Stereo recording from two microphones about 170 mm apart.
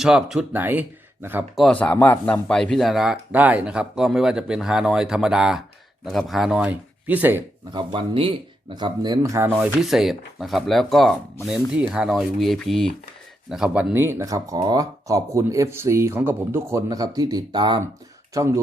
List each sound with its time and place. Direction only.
0.0 s speech: 5° right (ahead or behind)
1.5 s speech: 5° left (ahead or behind); by 7.4 s 10° right (ahead or behind)
7.7 s speech: 30° right (ahead or behind)